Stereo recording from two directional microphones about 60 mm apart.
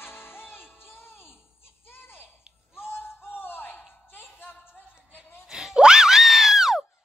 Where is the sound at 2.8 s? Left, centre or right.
Left.